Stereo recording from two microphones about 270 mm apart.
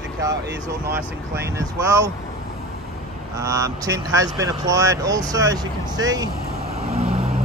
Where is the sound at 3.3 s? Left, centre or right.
Centre.